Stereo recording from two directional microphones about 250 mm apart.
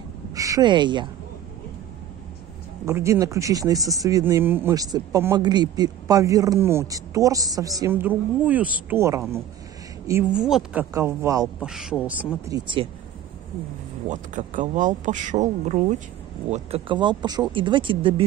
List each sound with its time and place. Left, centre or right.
0.3 s speech: centre
2.8 s speech: centre
12.4 s speech: centre
14.0 s speech: right